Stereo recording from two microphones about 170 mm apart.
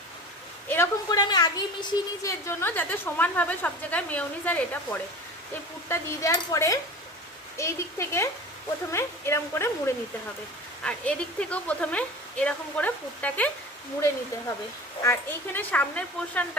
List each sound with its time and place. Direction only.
0.7 s a woman's voice: 20° left (ahead or behind)
15.0 s a woman's voice: 15° left (ahead or behind)